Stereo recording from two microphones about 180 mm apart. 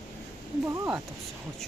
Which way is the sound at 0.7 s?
15° right (ahead or behind).